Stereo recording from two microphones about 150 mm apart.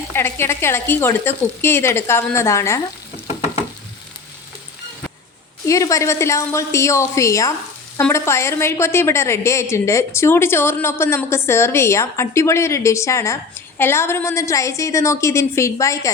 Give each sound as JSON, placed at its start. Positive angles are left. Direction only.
{"t": 0.1, "sound": "a woman's voice", "side_deg": 15}
{"t": 5.6, "sound": "a woman's voice", "side_deg": 20}